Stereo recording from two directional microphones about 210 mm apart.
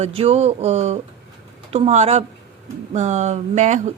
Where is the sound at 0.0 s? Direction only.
30° right (ahead or behind).